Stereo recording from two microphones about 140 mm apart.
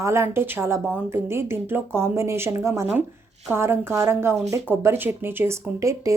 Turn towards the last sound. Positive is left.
turn(degrees=-25)  # may be behind; listen again after turning